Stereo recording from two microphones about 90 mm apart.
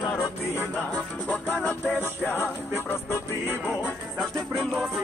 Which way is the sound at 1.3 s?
20° left (ahead or behind).